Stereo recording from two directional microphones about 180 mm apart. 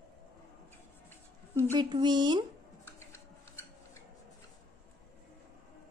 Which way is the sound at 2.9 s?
15° left (ahead or behind).